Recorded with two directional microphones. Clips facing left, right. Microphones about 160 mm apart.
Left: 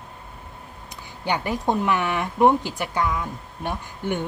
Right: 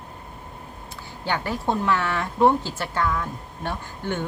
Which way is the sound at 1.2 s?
15° left (ahead or behind).